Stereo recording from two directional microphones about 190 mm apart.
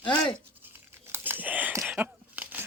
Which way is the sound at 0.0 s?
25° left (ahead or behind).